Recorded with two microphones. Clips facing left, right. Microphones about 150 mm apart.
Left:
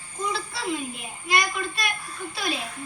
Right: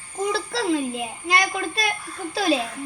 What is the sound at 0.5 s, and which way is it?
Speech, 90° right.